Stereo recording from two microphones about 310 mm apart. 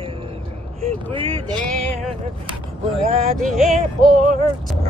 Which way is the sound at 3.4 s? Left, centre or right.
Centre.